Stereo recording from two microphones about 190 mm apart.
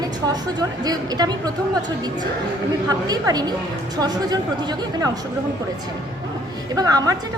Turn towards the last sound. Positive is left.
turn(degrees=-20)  # may be behind; listen again after turning